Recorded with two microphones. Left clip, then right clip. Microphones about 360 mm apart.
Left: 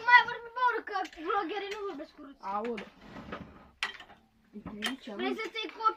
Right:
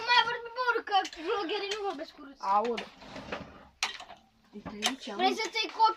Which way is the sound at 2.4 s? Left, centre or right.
Right.